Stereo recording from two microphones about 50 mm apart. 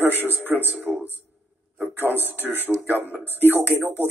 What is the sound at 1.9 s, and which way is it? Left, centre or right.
A man's voice, right.